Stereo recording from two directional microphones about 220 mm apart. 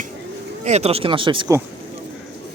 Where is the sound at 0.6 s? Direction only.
30° right (ahead or behind).